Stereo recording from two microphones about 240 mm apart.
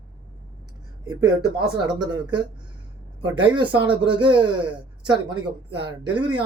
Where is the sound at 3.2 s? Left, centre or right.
Centre.